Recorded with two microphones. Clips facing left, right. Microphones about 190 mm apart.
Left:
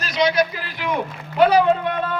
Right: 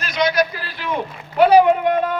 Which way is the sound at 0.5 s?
15° left (ahead or behind).